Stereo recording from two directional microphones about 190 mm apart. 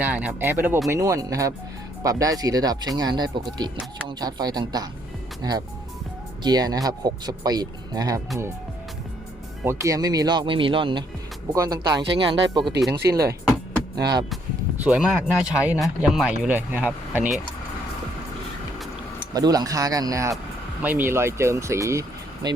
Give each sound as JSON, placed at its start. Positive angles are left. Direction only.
{"t": 0.0, "sound": "speech", "side_deg": -10}
{"t": 9.6, "sound": "speech", "side_deg": -15}
{"t": 12.9, "sound": "speech", "side_deg": -60}
{"t": 14.8, "sound": "speech", "side_deg": -5}
{"t": 19.3, "sound": "speech", "side_deg": -20}